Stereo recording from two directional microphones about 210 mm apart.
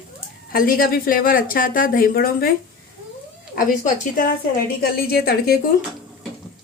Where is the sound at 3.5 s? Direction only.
40° left (ahead or behind).